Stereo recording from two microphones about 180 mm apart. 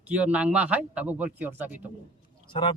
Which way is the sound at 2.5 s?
30° left (ahead or behind).